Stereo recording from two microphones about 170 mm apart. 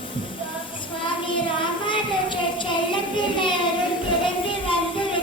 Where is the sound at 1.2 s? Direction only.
30° left (ahead or behind).